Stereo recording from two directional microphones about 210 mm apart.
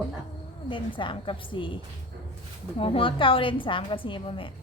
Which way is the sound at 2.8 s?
25° left (ahead or behind).